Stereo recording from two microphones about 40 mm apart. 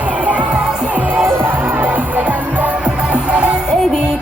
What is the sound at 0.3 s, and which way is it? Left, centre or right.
Music, right.